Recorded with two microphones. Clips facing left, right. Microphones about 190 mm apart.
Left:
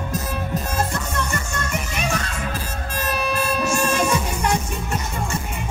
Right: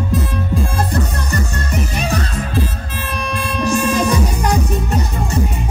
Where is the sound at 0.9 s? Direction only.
35° right (ahead or behind).